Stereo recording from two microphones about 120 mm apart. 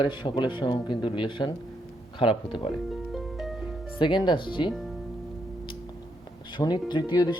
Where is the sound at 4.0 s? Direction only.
40° left (ahead or behind).